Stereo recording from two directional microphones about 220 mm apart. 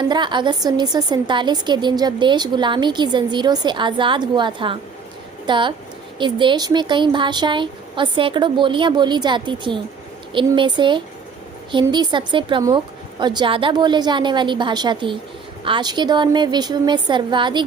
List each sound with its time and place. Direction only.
0.1 s a woman's voice: 20° right (ahead or behind)